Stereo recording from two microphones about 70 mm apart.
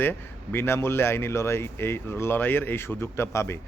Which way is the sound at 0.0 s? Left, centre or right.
Left.